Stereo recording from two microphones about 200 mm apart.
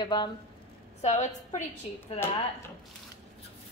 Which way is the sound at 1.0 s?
35° left (ahead or behind).